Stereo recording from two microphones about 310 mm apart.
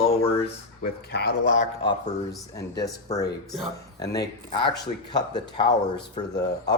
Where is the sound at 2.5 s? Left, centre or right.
Centre.